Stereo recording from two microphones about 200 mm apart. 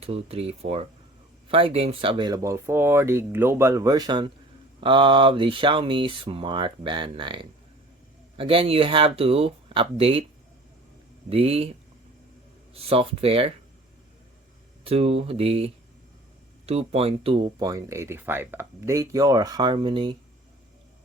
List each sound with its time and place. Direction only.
0.0 s speech: 30° right (ahead or behind)
8.4 s speech: 25° right (ahead or behind)
11.3 s speech: 30° right (ahead or behind)
12.7 s speech: 30° right (ahead or behind)
14.8 s speech: 30° right (ahead or behind)